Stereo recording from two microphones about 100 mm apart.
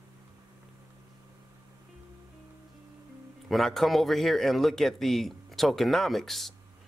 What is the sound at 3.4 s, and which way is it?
Speech, centre (ahead or behind).